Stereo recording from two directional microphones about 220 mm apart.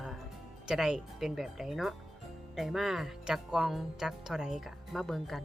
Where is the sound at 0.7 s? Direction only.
5° right (ahead or behind).